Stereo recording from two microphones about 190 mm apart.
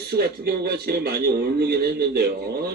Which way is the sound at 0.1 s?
55° right (ahead or behind).